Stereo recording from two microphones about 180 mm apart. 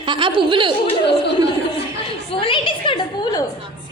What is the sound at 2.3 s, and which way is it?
A woman's voice, 30° left (ahead or behind).